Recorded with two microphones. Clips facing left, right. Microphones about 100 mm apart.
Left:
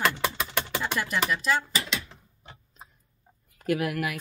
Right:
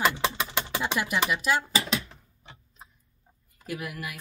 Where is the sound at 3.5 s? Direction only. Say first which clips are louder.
Left 9 dB; 70° left (ahead or behind); by 4.2 s 90° left.